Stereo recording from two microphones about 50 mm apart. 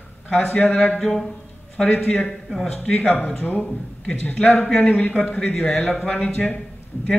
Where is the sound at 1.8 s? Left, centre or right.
Left.